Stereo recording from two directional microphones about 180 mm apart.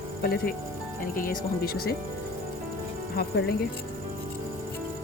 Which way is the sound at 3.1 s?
60° left (ahead or behind).